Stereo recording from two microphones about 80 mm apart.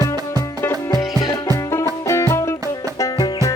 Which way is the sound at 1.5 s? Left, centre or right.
Left.